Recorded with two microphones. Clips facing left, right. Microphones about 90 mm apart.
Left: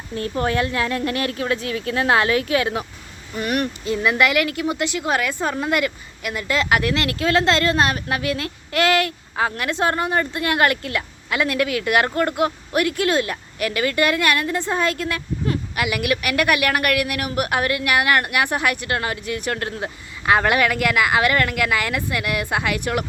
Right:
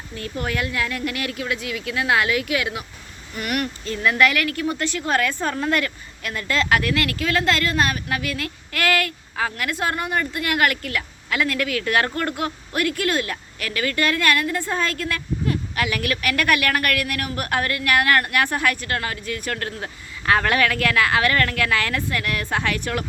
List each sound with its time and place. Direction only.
0.2 s speech: 30° left (ahead or behind)